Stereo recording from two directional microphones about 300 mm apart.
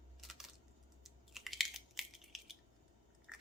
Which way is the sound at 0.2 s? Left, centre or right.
Centre.